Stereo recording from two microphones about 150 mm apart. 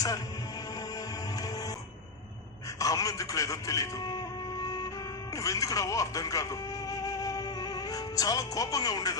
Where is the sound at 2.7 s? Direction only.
20° left (ahead or behind).